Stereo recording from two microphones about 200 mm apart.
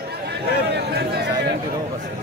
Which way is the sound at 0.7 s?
55° right (ahead or behind).